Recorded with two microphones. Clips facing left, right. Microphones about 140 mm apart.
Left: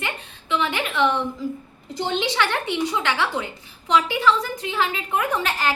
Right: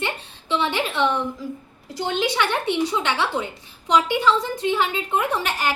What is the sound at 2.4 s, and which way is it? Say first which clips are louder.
A woman's voice: right 1 dB; 20° right (ahead or behind).